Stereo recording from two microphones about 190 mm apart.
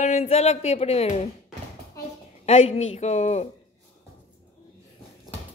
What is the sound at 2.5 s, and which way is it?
A woman's voice, 35° left (ahead or behind).